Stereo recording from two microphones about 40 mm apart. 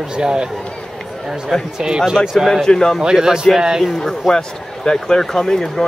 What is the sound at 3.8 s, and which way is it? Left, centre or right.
Speech, centre.